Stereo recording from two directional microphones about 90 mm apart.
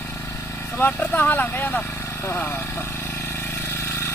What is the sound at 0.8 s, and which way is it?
Speech, 20° left (ahead or behind).